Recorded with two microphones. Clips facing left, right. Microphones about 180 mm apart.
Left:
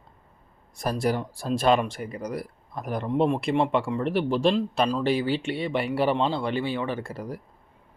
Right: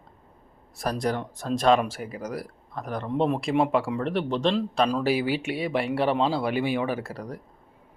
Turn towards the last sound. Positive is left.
turn(degrees=5)  # may be behind; listen again after turning